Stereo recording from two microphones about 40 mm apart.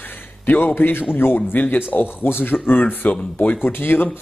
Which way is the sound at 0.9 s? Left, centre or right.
Left.